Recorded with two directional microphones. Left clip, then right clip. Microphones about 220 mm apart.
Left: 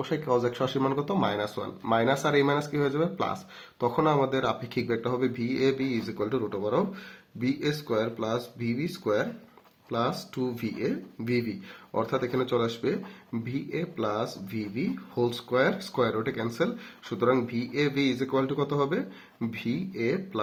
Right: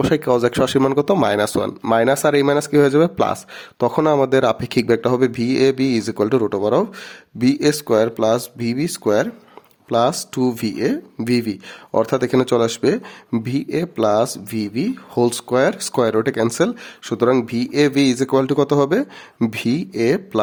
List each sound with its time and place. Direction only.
0.0 s speech: 45° right (ahead or behind)